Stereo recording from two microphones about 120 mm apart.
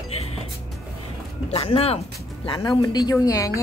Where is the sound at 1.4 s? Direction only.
55° left (ahead or behind).